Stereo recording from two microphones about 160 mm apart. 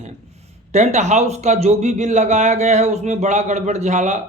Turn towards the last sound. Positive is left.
turn(degrees=-45)  # may be behind; listen again after turning